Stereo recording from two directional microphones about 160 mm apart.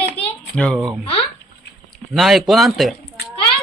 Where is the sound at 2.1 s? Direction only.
Centre (ahead or behind).